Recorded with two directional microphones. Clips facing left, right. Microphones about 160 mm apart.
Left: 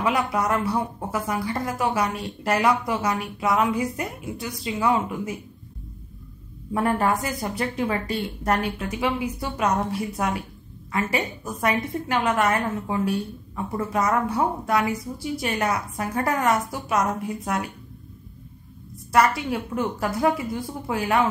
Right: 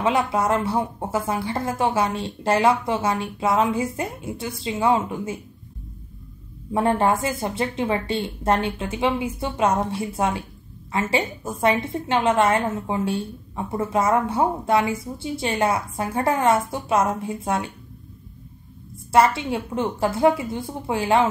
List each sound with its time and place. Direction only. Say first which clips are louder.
0.0 s a woman's voice: right 2 dB; 25° right (ahead or behind)
6.7 s a woman's voice: right 2 dB; 25° right (ahead or behind)
19.1 s a woman's voice: right 2 dB; 25° right (ahead or behind)